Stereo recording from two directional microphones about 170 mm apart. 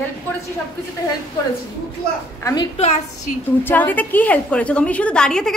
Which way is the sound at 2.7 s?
40° left (ahead or behind).